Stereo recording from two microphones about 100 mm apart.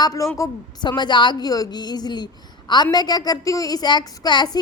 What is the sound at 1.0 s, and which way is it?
A woman's voice, 50° left (ahead or behind).